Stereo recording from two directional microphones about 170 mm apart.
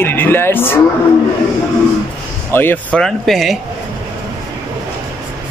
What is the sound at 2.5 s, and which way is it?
Speech, 10° left (ahead or behind).